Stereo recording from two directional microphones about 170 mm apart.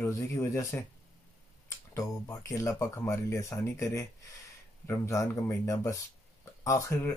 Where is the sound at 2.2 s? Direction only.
20° left (ahead or behind).